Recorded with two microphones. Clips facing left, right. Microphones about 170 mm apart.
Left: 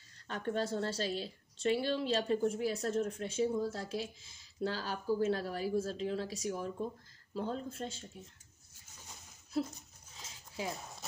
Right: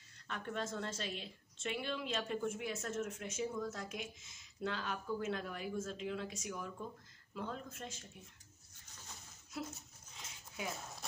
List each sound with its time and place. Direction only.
0.3 s a woman's voice: 35° left (ahead or behind)
9.5 s a woman's voice: 35° left (ahead or behind)
10.1 s a sound: 30° left (ahead or behind)
10.7 s speech: centre (ahead or behind)